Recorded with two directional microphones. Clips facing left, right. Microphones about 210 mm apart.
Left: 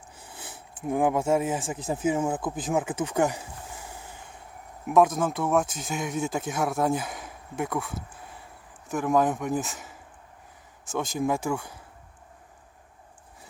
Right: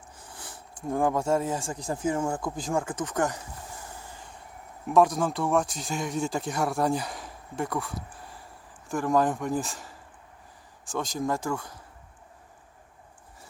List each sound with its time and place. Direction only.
0.7 s a sound: 5° left (ahead or behind)
1.1 s speech: 5° left (ahead or behind)
1.7 s speech: 20° left (ahead or behind)
2.0 s speech: 5° left (ahead or behind)
4.9 s speech: centre (ahead or behind)